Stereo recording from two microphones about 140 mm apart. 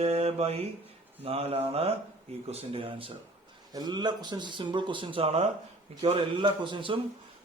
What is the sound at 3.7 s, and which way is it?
Speech, 30° right (ahead or behind).